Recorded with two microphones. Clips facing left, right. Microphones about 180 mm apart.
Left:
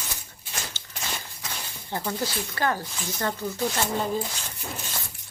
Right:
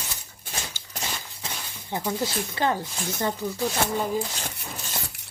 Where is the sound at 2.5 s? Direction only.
20° right (ahead or behind).